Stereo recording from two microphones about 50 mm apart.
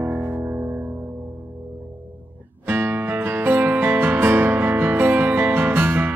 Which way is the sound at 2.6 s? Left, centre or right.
Right.